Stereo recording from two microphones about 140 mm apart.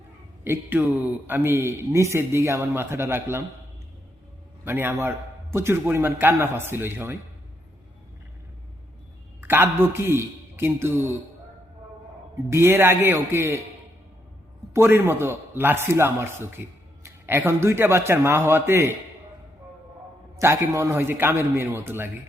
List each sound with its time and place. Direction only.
0.4 s a man's voice: 15° right (ahead or behind)
4.6 s a man's voice: 15° right (ahead or behind)
9.4 s a man's voice: 15° right (ahead or behind)
12.5 s a man's voice: 20° right (ahead or behind)
14.7 s a man's voice: 15° right (ahead or behind)
20.3 s a man's voice: 20° right (ahead or behind)